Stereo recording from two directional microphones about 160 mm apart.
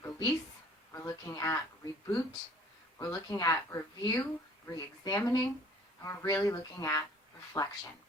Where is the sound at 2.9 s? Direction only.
20° left (ahead or behind).